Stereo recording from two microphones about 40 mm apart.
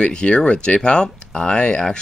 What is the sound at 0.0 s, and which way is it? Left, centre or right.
Speech, left.